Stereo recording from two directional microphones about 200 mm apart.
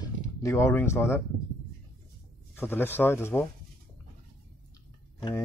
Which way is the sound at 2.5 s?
10° left (ahead or behind).